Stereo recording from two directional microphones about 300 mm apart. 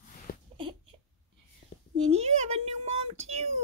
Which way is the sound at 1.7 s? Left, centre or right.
Left.